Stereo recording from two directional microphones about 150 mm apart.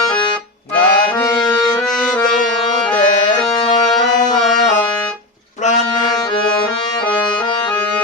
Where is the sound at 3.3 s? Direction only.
25° left (ahead or behind).